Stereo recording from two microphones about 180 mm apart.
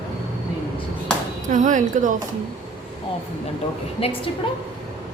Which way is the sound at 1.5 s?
45° right (ahead or behind).